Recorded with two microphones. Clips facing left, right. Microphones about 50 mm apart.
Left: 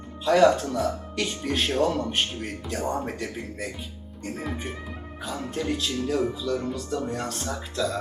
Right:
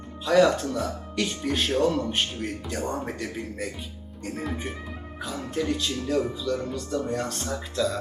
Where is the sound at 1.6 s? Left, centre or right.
Left.